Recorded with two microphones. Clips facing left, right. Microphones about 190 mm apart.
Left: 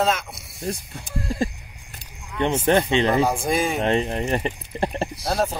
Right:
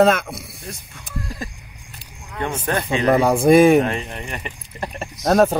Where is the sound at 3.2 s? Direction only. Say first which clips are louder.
Right 10 dB; 60° right (ahead or behind).